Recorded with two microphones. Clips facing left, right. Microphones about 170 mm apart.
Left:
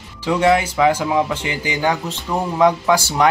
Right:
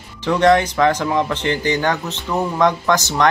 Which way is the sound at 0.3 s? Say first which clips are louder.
Right 2 dB; 10° left (ahead or behind).